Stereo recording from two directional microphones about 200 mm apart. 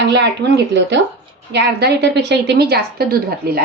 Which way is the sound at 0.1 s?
60° right (ahead or behind).